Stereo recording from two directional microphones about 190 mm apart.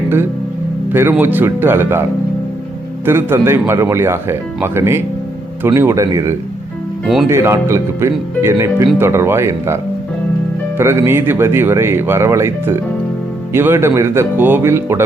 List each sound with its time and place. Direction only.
0.9 s speech: 10° right (ahead or behind)
3.1 s speech: 10° right (ahead or behind)
7.0 s speech: centre (ahead or behind)
7.3 s speech: 15° right (ahead or behind)
10.8 s speech: 15° right (ahead or behind)